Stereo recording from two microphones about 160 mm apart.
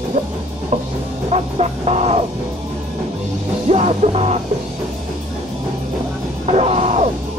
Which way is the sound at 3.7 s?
45° right (ahead or behind).